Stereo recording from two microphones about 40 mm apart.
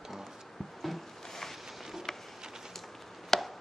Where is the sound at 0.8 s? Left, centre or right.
Centre.